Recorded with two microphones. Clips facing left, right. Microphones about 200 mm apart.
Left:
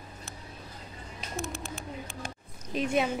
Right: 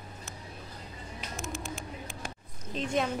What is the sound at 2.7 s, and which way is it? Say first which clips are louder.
Speech: left 3 dB; 10° left (ahead or behind).